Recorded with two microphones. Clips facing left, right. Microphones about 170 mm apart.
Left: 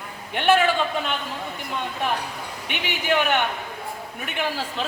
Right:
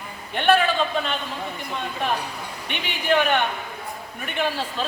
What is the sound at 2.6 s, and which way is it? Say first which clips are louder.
Speech: even; 15° left (ahead or behind).